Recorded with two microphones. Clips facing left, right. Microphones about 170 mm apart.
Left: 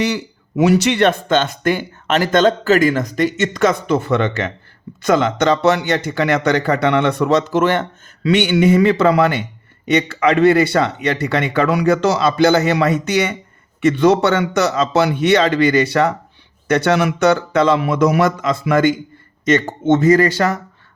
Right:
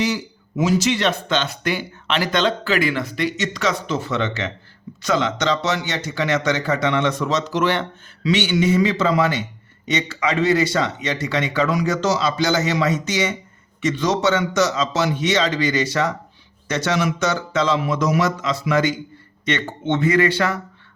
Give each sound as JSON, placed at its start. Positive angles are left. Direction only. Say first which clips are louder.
{"t": 0.0, "sound": "speech", "louder": "left 3 dB", "side_deg": 65}